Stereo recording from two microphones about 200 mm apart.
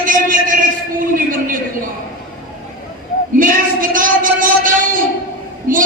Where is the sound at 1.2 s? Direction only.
45° right (ahead or behind).